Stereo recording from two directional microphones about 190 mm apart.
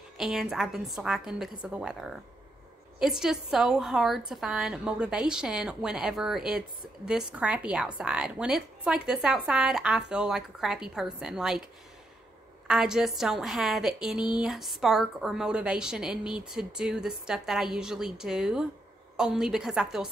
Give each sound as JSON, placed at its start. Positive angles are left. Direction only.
{"t": 0.2, "sound": "a woman's voice", "side_deg": 0}
{"t": 12.6, "sound": "a woman's voice", "side_deg": -5}